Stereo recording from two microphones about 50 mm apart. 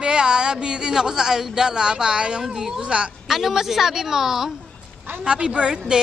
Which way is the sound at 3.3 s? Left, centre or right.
Centre.